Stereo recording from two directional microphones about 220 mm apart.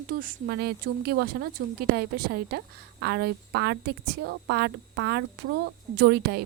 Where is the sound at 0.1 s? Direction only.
40° right (ahead or behind).